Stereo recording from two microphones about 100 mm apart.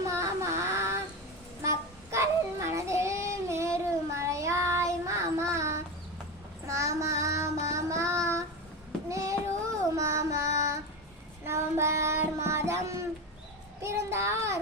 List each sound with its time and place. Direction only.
0.1 s child singing: 30° right (ahead or behind)
2.0 s child singing: 30° right (ahead or behind)